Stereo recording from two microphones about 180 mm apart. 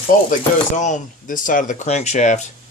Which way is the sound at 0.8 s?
45° left (ahead or behind).